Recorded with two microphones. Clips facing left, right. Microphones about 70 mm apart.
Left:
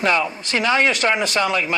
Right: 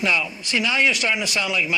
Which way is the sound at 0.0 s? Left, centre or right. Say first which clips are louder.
Left 4 dB; left.